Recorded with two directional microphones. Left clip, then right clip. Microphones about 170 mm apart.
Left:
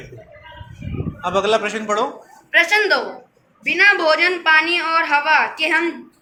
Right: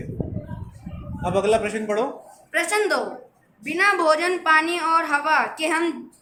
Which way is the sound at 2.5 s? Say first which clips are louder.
Left 7 dB; 60° right (ahead or behind).